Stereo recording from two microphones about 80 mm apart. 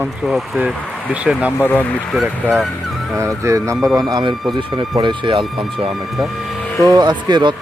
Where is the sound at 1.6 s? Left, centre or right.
Left.